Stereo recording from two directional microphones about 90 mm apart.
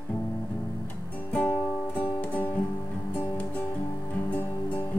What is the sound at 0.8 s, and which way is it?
Music, 15° left (ahead or behind).